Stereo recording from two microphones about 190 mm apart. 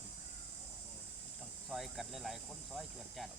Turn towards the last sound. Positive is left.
turn(degrees=0)  # may be behind; listen again after turning